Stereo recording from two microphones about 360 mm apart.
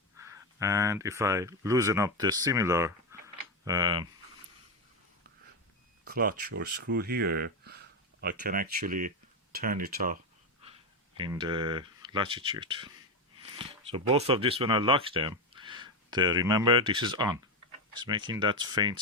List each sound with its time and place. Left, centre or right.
0.2 s speech: centre
6.1 s speech: right
11.2 s speech: centre